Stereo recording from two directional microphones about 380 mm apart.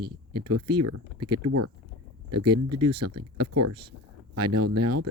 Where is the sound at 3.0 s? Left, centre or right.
Right.